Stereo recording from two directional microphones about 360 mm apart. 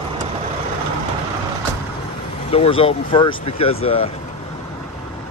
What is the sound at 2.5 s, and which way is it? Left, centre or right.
Speech, centre.